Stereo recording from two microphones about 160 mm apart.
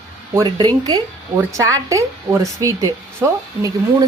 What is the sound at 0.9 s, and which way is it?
Speech, 20° right (ahead or behind).